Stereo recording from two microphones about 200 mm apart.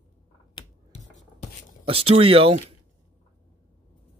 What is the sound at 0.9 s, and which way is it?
Music, 35° left (ahead or behind).